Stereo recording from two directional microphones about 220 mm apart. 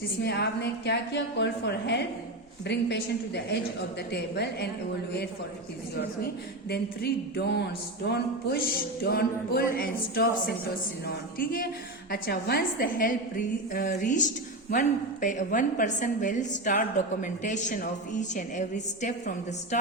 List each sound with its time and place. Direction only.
0.2 s music: 50° left (ahead or behind)
6.7 s music: 45° left (ahead or behind)
11.0 s a woman's voice: 40° left (ahead or behind)